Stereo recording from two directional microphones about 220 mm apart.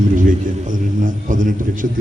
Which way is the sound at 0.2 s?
35° right (ahead or behind).